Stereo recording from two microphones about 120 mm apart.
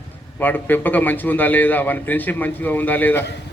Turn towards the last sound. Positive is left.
turn(degrees=15)  # may be behind; listen again after turning